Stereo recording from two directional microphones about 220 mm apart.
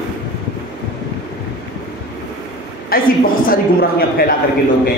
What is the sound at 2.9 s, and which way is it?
A man's voice, 40° left (ahead or behind).